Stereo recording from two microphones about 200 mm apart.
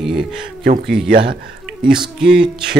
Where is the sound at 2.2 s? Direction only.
5° right (ahead or behind).